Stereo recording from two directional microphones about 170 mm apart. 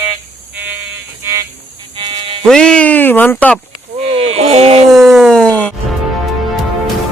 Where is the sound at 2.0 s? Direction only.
30° right (ahead or behind).